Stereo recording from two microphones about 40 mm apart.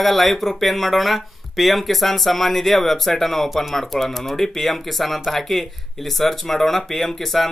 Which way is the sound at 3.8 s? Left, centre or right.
Centre.